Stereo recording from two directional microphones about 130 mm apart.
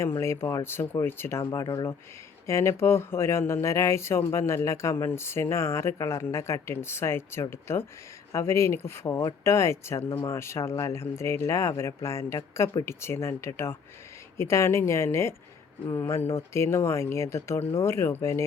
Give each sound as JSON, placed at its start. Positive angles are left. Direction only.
{"t": 0.2, "sound": "speech", "side_deg": 20}
{"t": 1.6, "sound": "speech", "side_deg": 35}
{"t": 2.5, "sound": "speech", "side_deg": 20}